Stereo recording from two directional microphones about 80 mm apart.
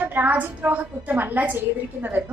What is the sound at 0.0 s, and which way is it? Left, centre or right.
A woman's voice, right.